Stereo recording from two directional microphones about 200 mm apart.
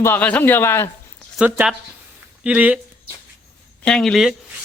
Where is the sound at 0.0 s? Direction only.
10° left (ahead or behind).